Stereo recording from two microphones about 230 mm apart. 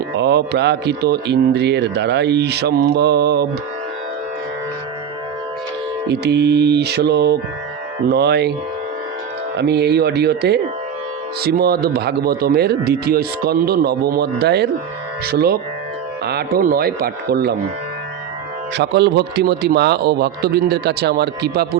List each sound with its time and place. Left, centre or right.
0.2 s speech: right
6.1 s speech: right
9.6 s speech: right
18.8 s speech: right